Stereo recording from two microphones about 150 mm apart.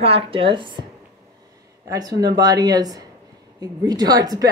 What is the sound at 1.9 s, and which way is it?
Speech, 25° right (ahead or behind).